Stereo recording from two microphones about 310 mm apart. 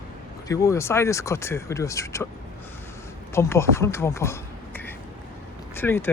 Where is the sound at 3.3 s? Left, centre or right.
Centre.